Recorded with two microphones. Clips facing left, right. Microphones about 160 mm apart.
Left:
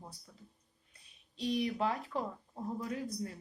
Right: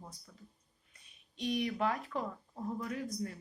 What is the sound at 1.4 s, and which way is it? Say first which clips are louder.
Speech: even; 30° left (ahead or behind).